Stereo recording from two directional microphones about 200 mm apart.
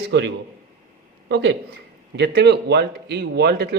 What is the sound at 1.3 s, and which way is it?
A man's voice, 60° right (ahead or behind).